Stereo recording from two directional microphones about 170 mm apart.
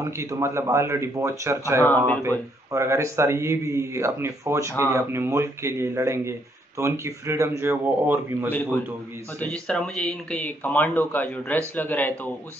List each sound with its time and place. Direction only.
0.0 s a man's voice: 15° right (ahead or behind)
8.5 s speech: 10° left (ahead or behind)